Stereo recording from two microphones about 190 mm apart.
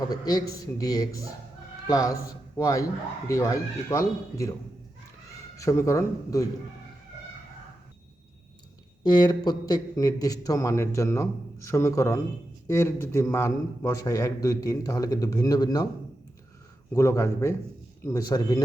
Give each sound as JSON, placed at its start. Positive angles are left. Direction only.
{"t": 0.0, "sound": "a man's voice", "side_deg": 20}
{"t": 5.5, "sound": "a man's voice", "side_deg": 15}
{"t": 9.0, "sound": "a man's voice", "side_deg": 20}
{"t": 16.9, "sound": "a man's voice", "side_deg": 15}